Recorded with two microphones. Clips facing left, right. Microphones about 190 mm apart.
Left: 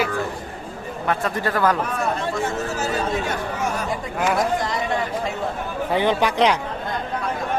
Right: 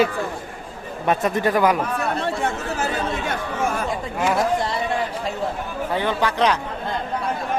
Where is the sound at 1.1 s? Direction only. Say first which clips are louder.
Right 4 dB; 20° right (ahead or behind).